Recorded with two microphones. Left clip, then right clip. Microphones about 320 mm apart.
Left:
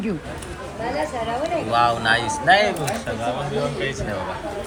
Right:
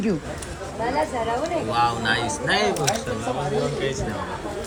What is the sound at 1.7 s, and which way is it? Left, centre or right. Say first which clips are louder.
Speech: left 4 dB; centre.